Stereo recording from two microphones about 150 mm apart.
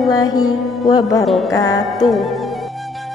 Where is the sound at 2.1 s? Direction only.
Centre (ahead or behind).